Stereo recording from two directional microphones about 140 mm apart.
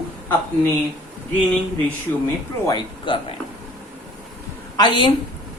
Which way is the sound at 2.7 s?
35° left (ahead or behind).